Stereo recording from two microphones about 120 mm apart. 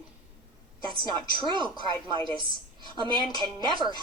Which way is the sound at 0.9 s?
45° right (ahead or behind).